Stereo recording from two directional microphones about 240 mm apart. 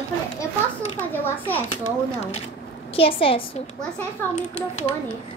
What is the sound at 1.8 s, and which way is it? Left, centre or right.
A woman's voice, left.